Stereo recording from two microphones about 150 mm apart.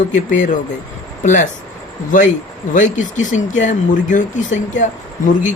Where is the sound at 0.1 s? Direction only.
55° left (ahead or behind).